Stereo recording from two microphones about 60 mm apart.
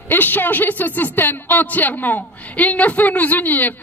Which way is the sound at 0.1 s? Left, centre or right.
Left.